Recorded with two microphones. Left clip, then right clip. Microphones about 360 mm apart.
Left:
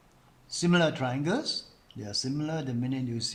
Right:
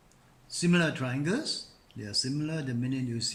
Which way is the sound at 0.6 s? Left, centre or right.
Centre.